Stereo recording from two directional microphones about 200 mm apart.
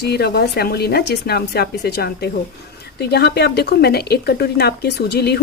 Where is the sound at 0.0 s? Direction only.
55° left (ahead or behind).